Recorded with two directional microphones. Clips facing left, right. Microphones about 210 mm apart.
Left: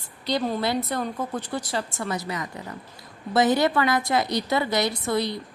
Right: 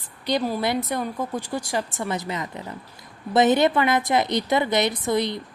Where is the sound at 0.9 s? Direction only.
15° right (ahead or behind).